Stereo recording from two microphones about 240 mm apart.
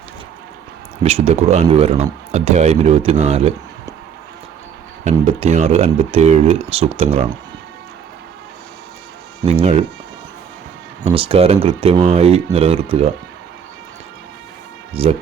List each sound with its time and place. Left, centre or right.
1.0 s speech: right
5.0 s speech: right
9.5 s speech: right
11.0 s speech: right
15.0 s speech: right